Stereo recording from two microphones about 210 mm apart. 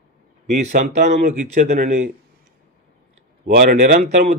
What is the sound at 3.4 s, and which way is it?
Speech, 45° right (ahead or behind).